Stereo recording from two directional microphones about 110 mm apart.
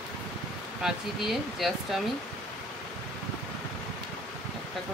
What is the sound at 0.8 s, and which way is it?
Speech, 5° right (ahead or behind).